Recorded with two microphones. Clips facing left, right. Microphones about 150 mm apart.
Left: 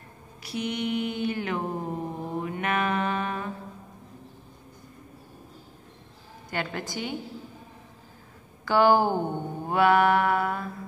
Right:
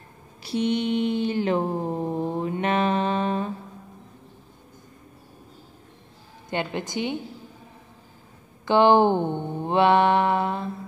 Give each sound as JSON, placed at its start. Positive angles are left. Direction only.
{"t": 0.4, "sound": "mantra", "side_deg": -30}
{"t": 6.5, "sound": "mantra", "side_deg": -20}
{"t": 8.6, "sound": "mantra", "side_deg": -20}